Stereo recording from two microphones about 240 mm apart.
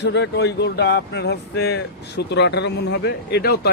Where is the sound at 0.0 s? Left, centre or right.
Left.